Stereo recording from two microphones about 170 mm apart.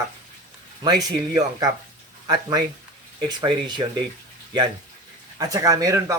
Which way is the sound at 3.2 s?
25° right (ahead or behind).